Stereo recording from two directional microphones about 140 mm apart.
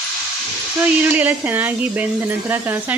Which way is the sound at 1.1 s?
10° right (ahead or behind).